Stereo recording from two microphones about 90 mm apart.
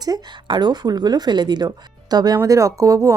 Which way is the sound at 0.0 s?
50° right (ahead or behind).